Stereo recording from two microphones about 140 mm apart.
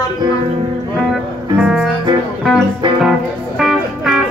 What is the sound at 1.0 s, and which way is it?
Music, 5° right (ahead or behind).